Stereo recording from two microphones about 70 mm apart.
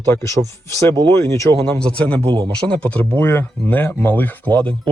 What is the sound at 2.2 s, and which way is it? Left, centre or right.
Speech, right.